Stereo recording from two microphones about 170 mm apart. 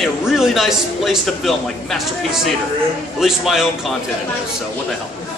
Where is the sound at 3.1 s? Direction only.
Centre (ahead or behind).